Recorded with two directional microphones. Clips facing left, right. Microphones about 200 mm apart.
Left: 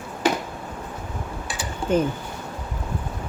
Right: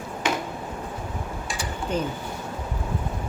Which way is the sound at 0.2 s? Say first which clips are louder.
Left 4 dB; 35° left (ahead or behind).